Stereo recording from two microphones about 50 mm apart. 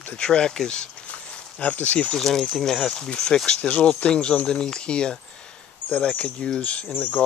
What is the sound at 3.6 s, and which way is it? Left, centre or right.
Speech, left.